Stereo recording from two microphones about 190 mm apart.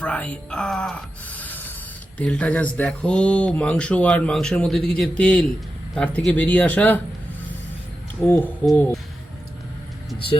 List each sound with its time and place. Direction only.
0.0 s speech: 5° left (ahead or behind)
8.6 s speech: 5° left (ahead or behind)